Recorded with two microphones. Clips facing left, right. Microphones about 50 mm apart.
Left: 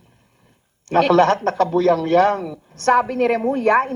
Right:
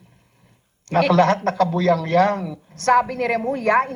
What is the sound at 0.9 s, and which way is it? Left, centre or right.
A woman's voice, left.